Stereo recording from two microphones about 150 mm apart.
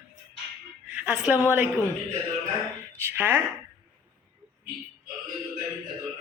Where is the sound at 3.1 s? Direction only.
15° right (ahead or behind).